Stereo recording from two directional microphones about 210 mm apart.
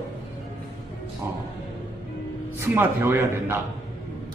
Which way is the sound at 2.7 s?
10° right (ahead or behind).